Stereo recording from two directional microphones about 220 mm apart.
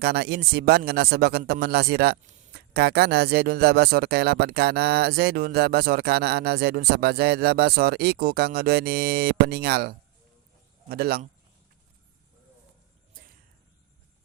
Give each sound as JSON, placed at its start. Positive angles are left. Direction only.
{"t": 0.0, "sound": "speech", "side_deg": -45}